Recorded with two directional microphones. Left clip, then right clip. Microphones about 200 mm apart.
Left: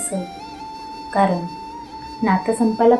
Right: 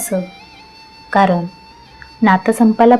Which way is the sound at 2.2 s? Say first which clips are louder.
Right 6 dB; 60° right (ahead or behind).